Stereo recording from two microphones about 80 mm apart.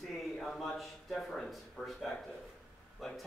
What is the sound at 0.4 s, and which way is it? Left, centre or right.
Speech, centre.